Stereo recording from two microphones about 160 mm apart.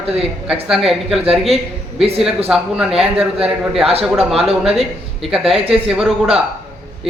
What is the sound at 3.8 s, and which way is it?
Speech, 35° right (ahead or behind).